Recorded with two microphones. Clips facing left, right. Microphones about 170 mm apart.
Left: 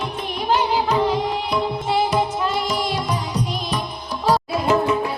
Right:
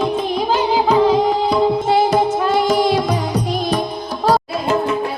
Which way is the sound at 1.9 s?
50° right (ahead or behind).